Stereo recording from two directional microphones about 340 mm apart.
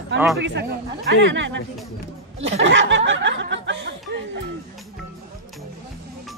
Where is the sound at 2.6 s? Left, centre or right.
Right.